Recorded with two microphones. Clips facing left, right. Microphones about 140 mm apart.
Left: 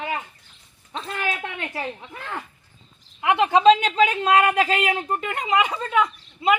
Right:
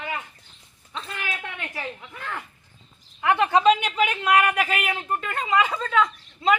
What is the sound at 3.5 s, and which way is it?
A man's voice, 25° left (ahead or behind).